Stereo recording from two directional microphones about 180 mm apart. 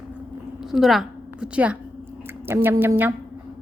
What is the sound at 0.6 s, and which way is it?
A woman's voice, centre (ahead or behind).